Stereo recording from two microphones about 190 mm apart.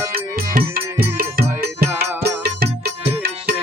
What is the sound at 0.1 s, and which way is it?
Music, 50° right (ahead or behind).